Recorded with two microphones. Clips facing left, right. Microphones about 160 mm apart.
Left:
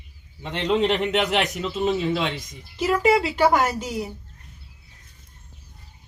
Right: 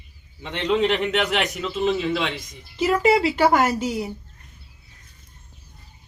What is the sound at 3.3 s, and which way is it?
Speech, centre (ahead or behind).